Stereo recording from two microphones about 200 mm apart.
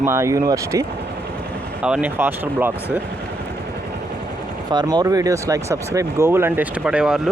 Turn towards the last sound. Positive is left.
turn(degrees=-5)  # may be behind; listen again after turning